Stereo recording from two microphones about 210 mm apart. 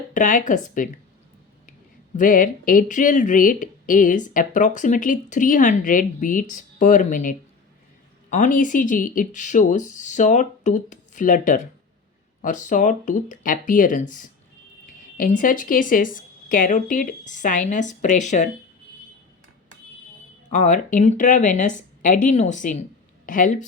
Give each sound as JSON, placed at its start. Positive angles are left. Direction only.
{"t": 0.1, "sound": "speech", "side_deg": 35}
{"t": 2.1, "sound": "speech", "side_deg": 40}
{"t": 20.5, "sound": "speech", "side_deg": 35}